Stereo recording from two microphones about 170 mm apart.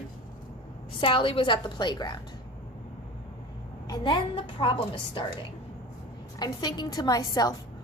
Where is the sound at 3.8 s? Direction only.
25° left (ahead or behind).